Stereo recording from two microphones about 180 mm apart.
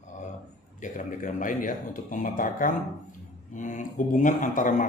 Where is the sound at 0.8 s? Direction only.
45° left (ahead or behind).